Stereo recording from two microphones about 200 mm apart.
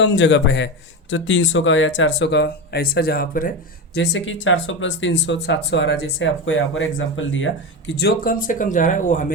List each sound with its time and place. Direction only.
0.0 s speech: 65° left (ahead or behind); by 3.5 s 45° left (ahead or behind)
3.9 s speech: 60° left (ahead or behind); by 9.2 s 40° left (ahead or behind)